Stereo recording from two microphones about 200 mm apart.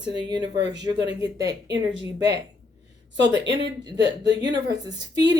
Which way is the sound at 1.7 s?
60° right (ahead or behind).